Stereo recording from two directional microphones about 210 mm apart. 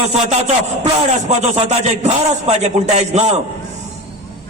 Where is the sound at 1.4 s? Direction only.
35° right (ahead or behind).